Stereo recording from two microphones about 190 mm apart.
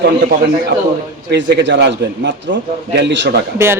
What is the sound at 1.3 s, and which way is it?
A man's voice, 65° right (ahead or behind).